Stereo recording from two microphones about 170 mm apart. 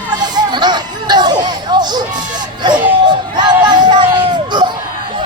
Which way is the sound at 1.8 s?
25° right (ahead or behind).